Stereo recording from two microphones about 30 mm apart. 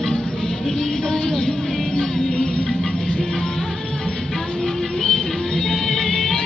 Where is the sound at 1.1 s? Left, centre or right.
Left.